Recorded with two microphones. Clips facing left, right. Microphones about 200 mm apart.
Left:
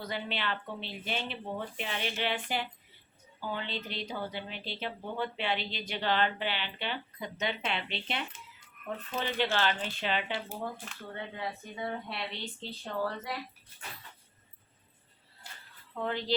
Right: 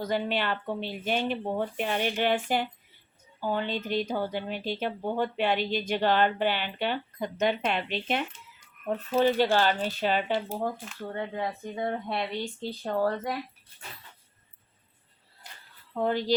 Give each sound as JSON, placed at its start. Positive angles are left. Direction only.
{"t": 0.0, "sound": "speech", "side_deg": -45}
{"t": 16.0, "sound": "speech", "side_deg": -40}